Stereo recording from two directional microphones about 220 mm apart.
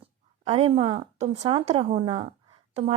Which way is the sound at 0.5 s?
25° right (ahead or behind).